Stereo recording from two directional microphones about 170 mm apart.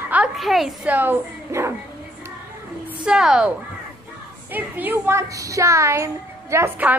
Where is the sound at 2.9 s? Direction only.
5° right (ahead or behind).